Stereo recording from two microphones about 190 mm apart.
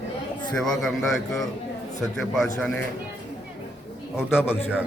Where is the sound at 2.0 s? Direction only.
5° left (ahead or behind).